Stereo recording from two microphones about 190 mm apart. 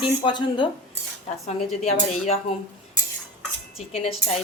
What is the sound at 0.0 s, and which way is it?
Speech, 25° left (ahead or behind).